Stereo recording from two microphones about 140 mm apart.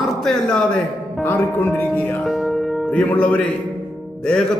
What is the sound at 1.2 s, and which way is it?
Speech, 15° left (ahead or behind).